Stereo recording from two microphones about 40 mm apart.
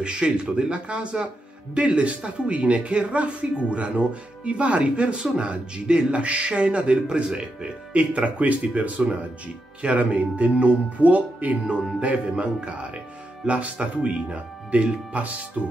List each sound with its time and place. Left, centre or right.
0.0 s a man's voice: right